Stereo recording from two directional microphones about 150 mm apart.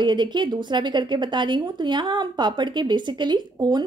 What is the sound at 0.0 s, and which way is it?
A woman's voice, 30° right (ahead or behind).